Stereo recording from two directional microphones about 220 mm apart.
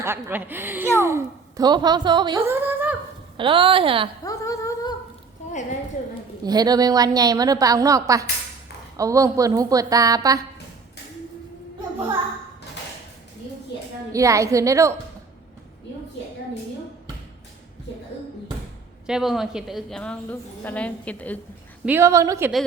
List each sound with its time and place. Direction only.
0.0 s a woman's voice: 10° right (ahead or behind)
3.3 s a woman's voice: 25° right (ahead or behind)
4.2 s humming: 15° left (ahead or behind)
6.4 s a woman's voice: 15° right (ahead or behind)
14.1 s a woman's voice: 15° right (ahead or behind)
19.0 s a woman's voice: centre (ahead or behind)
21.8 s a woman's voice: 10° right (ahead or behind)